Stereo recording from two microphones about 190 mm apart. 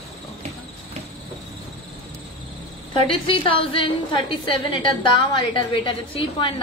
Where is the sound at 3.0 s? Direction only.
30° left (ahead or behind).